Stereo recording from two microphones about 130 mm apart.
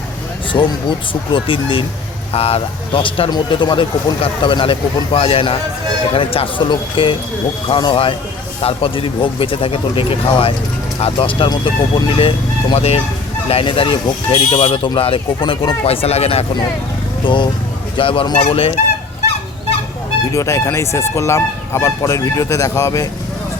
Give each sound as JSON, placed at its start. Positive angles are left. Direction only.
{"t": 0.5, "sound": "speech", "side_deg": 35}
{"t": 12.7, "sound": "speech", "side_deg": 50}
{"t": 17.2, "sound": "speech", "side_deg": 40}
{"t": 20.3, "sound": "speech", "side_deg": 25}